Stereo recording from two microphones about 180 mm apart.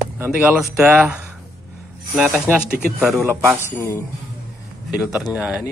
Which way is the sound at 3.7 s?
15° left (ahead or behind).